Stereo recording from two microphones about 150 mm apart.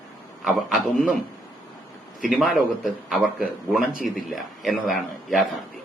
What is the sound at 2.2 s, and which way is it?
Speech, centre (ahead or behind).